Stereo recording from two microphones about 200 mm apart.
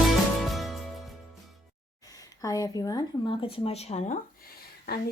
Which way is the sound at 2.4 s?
20° left (ahead or behind).